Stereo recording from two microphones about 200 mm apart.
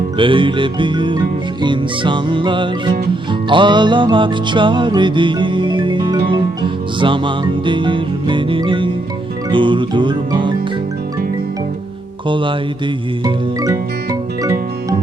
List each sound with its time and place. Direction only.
0.2 s speech: 25° right (ahead or behind)
3.5 s music: 25° right (ahead or behind)
7.0 s speech: 25° right (ahead or behind)
12.3 s speech: 25° right (ahead or behind)
13.2 s music: 20° right (ahead or behind)